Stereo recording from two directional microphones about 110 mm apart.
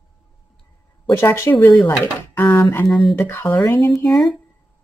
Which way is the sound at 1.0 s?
25° left (ahead or behind).